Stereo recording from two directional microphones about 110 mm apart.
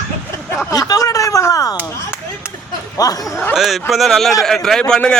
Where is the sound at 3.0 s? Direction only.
35° left (ahead or behind).